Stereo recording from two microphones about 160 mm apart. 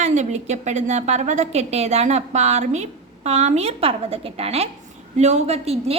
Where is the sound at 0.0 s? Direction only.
45° right (ahead or behind).